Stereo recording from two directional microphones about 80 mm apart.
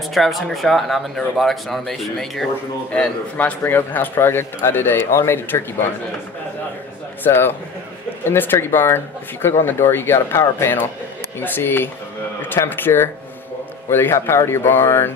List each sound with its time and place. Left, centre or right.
0.1 s speech: centre
2.9 s a man's voice: centre
7.2 s a man's voice: left